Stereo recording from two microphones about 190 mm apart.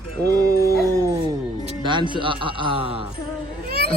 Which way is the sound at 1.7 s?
25° right (ahead or behind).